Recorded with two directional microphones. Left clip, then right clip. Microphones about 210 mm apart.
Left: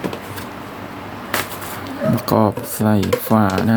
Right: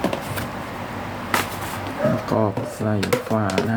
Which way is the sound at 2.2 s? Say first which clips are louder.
Left 5 dB; 45° left (ahead or behind).